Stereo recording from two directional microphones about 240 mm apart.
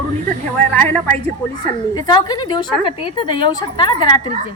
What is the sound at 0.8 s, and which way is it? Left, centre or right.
A woman's voice, centre.